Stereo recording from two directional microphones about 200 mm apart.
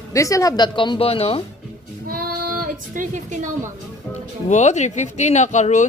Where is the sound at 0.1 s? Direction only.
15° left (ahead or behind).